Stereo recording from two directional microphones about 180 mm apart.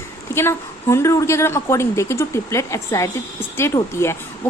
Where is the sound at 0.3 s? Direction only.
15° left (ahead or behind).